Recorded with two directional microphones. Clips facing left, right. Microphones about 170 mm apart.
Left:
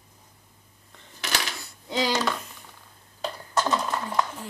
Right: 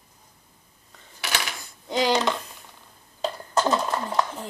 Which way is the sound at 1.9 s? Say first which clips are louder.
Right 3 dB; 15° right (ahead or behind).